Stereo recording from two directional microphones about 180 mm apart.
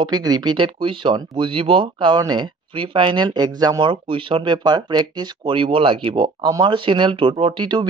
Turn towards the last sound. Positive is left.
turn(degrees=-25)  # may be behind; listen again after turning